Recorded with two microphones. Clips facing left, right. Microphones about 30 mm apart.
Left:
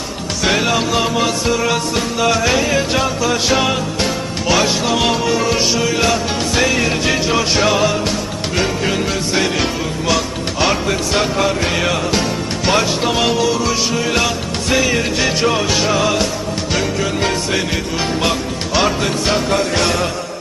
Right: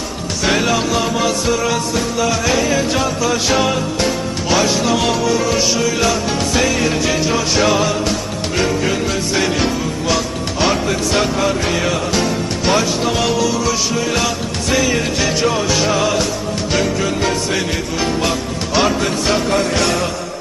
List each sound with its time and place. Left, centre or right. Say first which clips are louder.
0.4 s music: even; centre
2.0 s music: left 1 dB; left
2.5 s music: even; centre
7.6 s music: even; centre
15.4 s music: left 1 dB; left
15.7 s music: even; centre
18.7 s music: right 1 dB; centre